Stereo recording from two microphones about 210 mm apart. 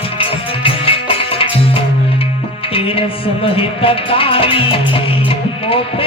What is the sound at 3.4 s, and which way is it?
Music, 25° left (ahead or behind).